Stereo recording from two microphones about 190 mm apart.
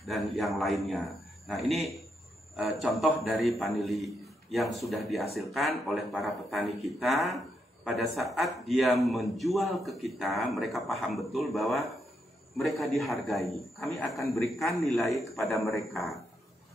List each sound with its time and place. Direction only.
0.0 s speech: centre (ahead or behind)